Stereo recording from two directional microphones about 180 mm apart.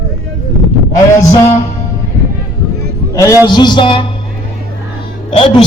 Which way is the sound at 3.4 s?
25° left (ahead or behind).